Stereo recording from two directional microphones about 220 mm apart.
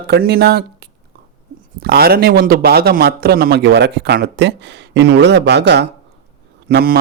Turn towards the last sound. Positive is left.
turn(degrees=-40)  # may be behind; listen again after turning